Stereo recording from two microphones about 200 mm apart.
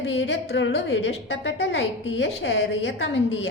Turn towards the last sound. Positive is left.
turn(degrees=70)  # may be behind; listen again after turning